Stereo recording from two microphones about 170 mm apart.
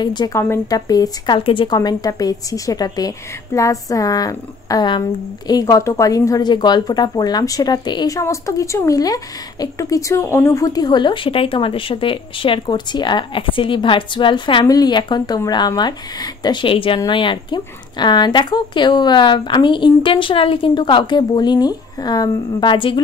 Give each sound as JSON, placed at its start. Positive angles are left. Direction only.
{"t": 0.0, "sound": "a woman's voice", "side_deg": 25}